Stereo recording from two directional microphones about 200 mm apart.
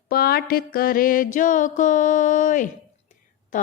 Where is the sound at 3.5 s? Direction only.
40° left (ahead or behind).